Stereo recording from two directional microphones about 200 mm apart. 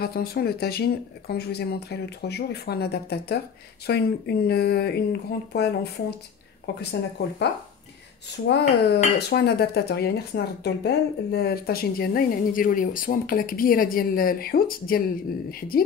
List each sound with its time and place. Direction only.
0.0 s speech: 50° left (ahead or behind)
8.5 s speech: 55° left (ahead or behind)